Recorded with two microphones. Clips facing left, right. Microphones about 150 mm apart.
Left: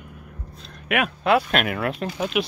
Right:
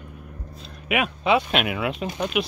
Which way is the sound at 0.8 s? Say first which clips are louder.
Left 1 dB; centre (ahead or behind).